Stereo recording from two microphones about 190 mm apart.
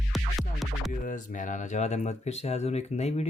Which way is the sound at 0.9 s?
45° left (ahead or behind).